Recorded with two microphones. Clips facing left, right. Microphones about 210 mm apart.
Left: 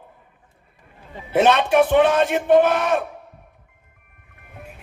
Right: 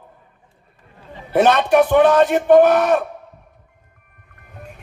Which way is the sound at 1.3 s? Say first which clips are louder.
Right 2 dB; 40° right (ahead or behind).